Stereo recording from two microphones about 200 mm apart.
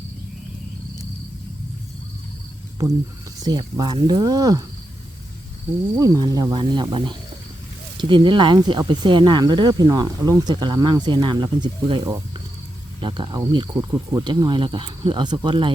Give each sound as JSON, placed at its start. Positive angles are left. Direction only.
{"t": 3.4, "sound": "speech", "side_deg": -20}
{"t": 6.0, "sound": "speech", "side_deg": -20}